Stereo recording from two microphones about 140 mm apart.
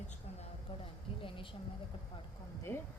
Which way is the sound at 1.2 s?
40° left (ahead or behind).